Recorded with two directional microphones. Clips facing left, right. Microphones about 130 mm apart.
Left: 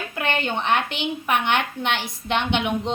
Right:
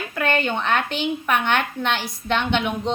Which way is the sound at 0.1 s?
20° left (ahead or behind).